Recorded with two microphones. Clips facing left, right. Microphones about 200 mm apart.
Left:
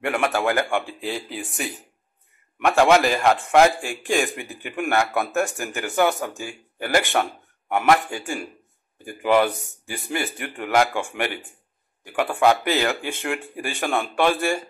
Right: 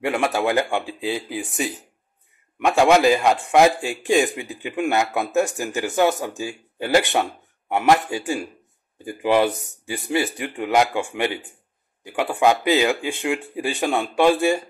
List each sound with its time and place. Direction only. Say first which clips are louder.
0.0 s a man's voice: right 1 dB; 20° right (ahead or behind)